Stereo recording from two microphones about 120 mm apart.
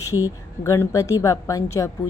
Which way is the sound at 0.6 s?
25° left (ahead or behind).